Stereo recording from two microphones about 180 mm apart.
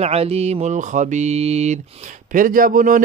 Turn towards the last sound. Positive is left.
turn(degrees=-50)  # may be behind; listen again after turning